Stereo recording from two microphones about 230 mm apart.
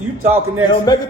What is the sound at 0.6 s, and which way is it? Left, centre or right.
Speech, centre.